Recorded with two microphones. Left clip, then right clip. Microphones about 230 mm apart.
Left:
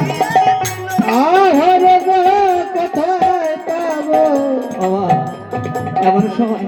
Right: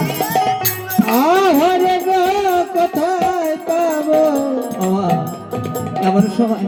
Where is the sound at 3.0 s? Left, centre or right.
Right.